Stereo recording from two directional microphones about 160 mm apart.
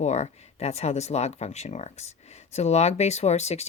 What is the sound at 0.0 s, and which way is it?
Speech, 45° left (ahead or behind).